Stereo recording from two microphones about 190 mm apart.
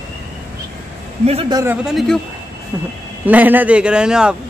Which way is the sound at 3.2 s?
10° right (ahead or behind).